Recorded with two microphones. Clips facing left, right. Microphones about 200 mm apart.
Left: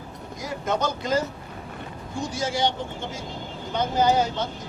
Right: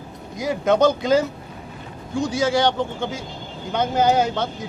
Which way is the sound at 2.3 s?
75° right (ahead or behind).